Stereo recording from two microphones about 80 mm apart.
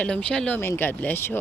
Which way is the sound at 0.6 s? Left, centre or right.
Left.